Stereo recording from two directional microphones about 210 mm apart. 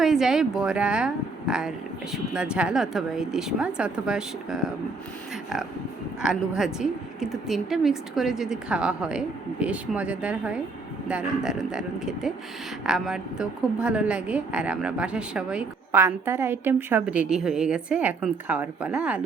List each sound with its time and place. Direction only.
0.0 s a woman's voice: centre (ahead or behind)
6.2 s a woman's voice: 5° right (ahead or behind)